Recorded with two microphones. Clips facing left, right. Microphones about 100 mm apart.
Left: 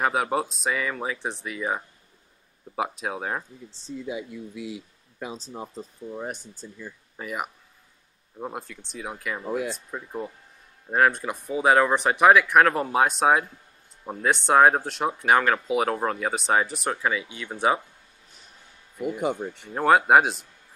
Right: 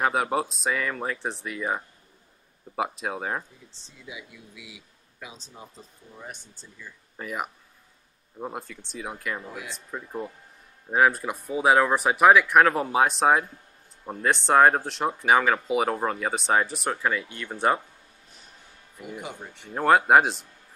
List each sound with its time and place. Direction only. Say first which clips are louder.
0.0 s speech: even; centre (ahead or behind)
4.0 s speech: left 9 dB; 45° left (ahead or behind)
6.6 s speech: left 10 dB; 60° left (ahead or behind)
7.2 s speech: even; 5° left (ahead or behind)
9.5 s speech: left 10 dB; 45° left (ahead or behind)
9.8 s speech: left 1 dB; centre (ahead or behind)
19.0 s speech: left 10 dB; centre (ahead or behind)